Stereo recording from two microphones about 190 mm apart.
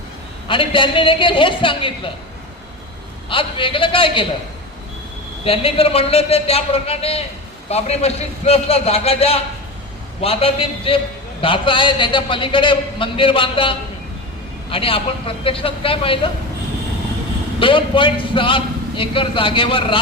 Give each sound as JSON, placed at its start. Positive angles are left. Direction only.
{"t": 0.4, "sound": "a man's voice", "side_deg": 25}
{"t": 3.2, "sound": "a man's voice", "side_deg": 25}
{"t": 5.5, "sound": "a man's voice", "side_deg": 30}
{"t": 17.6, "sound": "a man's voice", "side_deg": 25}